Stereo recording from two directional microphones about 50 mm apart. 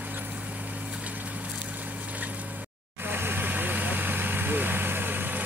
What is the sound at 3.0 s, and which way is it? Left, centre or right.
Vehicle, right.